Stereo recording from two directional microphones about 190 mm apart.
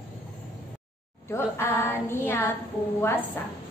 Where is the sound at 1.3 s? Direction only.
15° left (ahead or behind).